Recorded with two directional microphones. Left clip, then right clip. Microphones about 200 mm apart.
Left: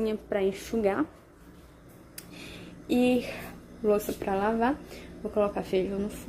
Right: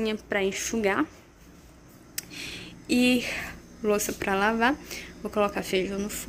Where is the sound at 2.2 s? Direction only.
Centre (ahead or behind).